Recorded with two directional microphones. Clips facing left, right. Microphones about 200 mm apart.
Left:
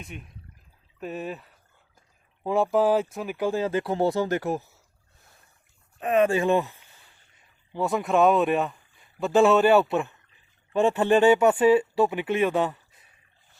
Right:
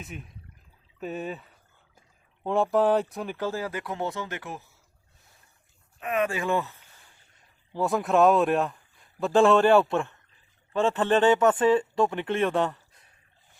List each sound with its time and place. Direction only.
0.0 s speech: centre (ahead or behind); by 4.6 s 40° left (ahead or behind)
6.0 s speech: 30° left (ahead or behind); by 7.0 s 10° left (ahead or behind)
7.7 s speech: centre (ahead or behind)